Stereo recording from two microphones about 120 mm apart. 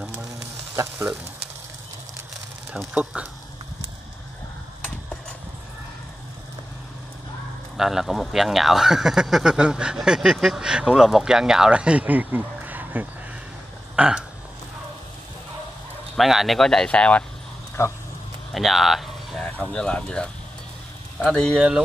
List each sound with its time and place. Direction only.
2.7 s speech: 5° right (ahead or behind)
7.7 s speech: 5° right (ahead or behind)
13.9 s a sound: 10° right (ahead or behind)
16.2 s speech: centre (ahead or behind)
17.8 s speech: 25° left (ahead or behind)
18.5 s a sound: centre (ahead or behind)
19.4 s speech: 10° left (ahead or behind)
21.5 s speech: 10° right (ahead or behind)